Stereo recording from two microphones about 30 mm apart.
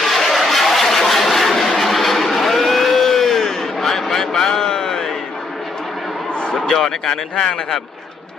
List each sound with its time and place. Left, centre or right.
0.0 s vehicle: centre
1.8 s a sound: centre; by 5.1 s left
6.7 s speech: centre